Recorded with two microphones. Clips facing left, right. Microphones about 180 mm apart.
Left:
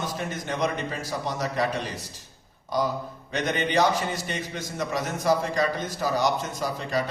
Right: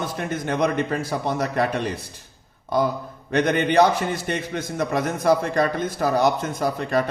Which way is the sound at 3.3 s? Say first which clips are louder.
Right 6 dB; 55° right (ahead or behind).